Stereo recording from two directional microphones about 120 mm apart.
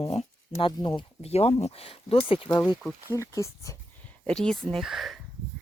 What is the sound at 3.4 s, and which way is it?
Speech, 25° left (ahead or behind).